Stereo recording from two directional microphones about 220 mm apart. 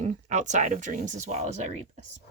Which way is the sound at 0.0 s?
30° right (ahead or behind).